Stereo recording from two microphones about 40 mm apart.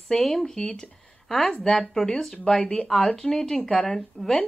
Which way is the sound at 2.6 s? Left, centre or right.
Left.